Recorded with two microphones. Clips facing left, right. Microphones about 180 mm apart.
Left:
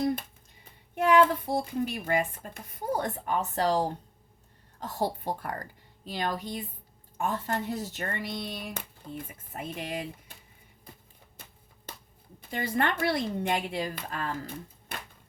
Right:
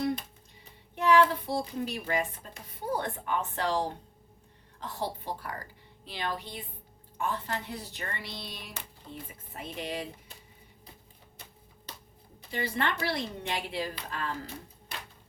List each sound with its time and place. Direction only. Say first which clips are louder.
0.0 s a sound: left 2 dB; 50° left (ahead or behind)
1.5 s speech: left 3 dB; 50° left (ahead or behind)
12.4 s speech: left 3 dB; 50° left (ahead or behind)